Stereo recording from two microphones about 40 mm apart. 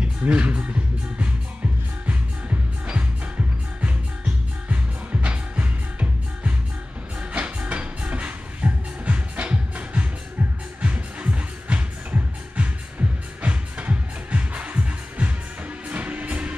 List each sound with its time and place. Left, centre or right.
0.3 s speech: right
2.0 s music: right
4.6 s music: right